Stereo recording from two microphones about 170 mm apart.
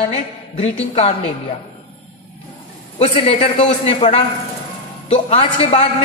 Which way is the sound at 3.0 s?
35° left (ahead or behind).